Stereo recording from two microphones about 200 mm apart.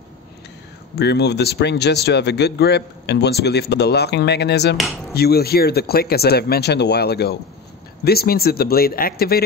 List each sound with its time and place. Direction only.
0.9 s speech: 55° left (ahead or behind)